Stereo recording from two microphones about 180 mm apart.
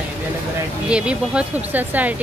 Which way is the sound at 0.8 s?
5° right (ahead or behind).